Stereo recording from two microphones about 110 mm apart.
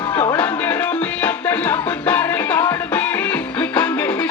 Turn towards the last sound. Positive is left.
turn(degrees=10)  # may be behind; listen again after turning